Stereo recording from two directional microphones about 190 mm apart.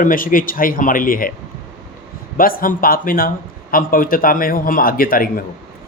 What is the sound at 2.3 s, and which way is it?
Speech, 50° left (ahead or behind).